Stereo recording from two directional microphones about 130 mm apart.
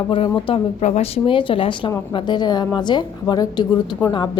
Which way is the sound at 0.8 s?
60° left (ahead or behind).